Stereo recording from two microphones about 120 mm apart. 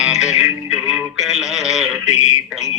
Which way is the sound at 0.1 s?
70° left (ahead or behind).